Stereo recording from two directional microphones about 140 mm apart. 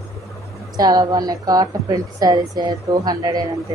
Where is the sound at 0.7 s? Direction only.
30° right (ahead or behind).